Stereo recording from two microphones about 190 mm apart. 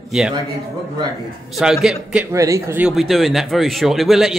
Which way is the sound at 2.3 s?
15° right (ahead or behind).